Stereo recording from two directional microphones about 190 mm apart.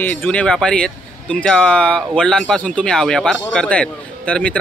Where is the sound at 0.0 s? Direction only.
10° left (ahead or behind).